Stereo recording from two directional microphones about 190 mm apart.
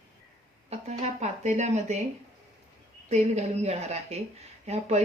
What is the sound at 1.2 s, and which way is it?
Speech, 40° right (ahead or behind).